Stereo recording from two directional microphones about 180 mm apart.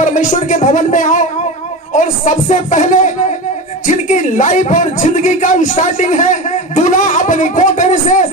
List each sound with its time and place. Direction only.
0.0 s a man's voice: 45° left (ahead or behind)